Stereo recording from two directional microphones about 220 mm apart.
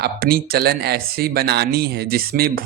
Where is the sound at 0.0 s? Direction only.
45° right (ahead or behind).